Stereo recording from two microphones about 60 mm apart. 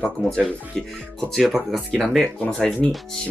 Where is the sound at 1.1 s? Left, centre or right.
Centre.